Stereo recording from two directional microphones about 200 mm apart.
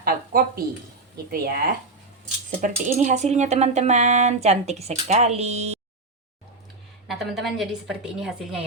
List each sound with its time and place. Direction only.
0.0 s a sound: 45° right (ahead or behind)
1.1 s speech: 50° right (ahead or behind)
2.6 s speech: 40° right (ahead or behind)
7.1 s a woman's voice: centre (ahead or behind)